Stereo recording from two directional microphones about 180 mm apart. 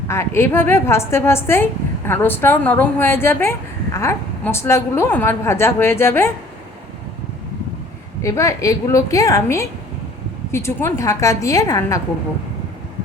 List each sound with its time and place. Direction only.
0.1 s a woman's voice: 15° left (ahead or behind)
8.2 s a woman's voice: 15° left (ahead or behind)